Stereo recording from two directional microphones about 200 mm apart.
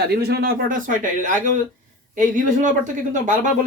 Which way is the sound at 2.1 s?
40° right (ahead or behind).